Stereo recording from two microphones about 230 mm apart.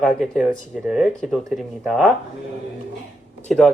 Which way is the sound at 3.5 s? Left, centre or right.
Centre.